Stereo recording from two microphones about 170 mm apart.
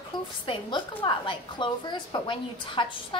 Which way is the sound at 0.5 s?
30° left (ahead or behind).